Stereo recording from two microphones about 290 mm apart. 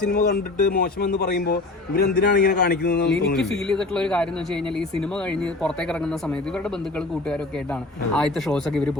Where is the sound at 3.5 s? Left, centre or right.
Centre.